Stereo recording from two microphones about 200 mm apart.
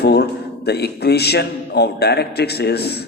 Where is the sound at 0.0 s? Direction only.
55° left (ahead or behind).